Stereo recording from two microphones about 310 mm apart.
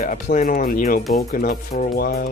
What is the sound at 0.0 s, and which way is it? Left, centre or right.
Speech, left.